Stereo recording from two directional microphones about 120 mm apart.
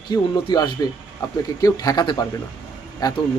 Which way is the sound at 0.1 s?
35° left (ahead or behind).